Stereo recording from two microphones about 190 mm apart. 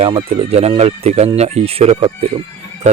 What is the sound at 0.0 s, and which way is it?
Speech, 30° right (ahead or behind).